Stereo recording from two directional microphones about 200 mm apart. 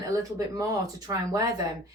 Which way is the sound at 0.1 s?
15° right (ahead or behind).